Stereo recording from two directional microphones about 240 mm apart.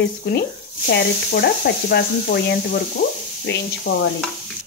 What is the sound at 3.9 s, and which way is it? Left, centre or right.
Speech, left.